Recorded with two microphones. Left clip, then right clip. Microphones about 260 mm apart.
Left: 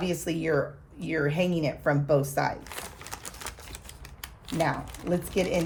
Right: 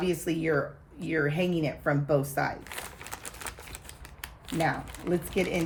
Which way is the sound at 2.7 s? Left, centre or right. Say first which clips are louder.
Even; centre.